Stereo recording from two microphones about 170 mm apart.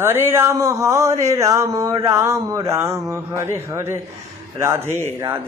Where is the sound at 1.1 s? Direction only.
40° right (ahead or behind).